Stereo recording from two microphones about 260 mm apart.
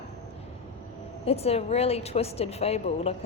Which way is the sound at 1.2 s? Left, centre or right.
Left.